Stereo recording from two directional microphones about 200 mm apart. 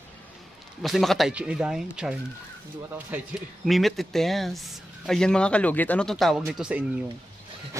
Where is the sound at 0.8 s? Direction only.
Centre (ahead or behind).